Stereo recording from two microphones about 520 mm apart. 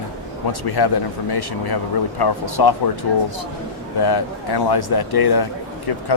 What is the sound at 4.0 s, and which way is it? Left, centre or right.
Speech, left.